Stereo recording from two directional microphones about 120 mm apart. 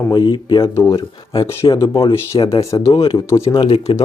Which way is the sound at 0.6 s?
25° left (ahead or behind).